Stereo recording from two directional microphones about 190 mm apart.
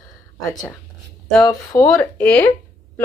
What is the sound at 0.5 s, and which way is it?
Speech, 20° left (ahead or behind).